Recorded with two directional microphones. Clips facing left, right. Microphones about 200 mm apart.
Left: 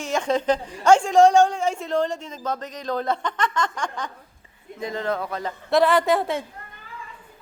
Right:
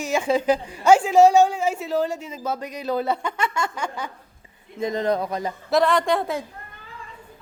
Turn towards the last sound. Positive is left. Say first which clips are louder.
# left 1 dB
turn(degrees=0)  # may be behind; listen again after turning